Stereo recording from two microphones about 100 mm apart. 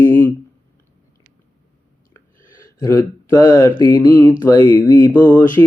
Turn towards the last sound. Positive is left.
turn(degrees=20)  # may be behind; listen again after turning